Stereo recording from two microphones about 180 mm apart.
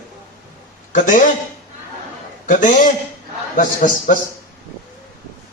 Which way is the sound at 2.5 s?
45° left (ahead or behind).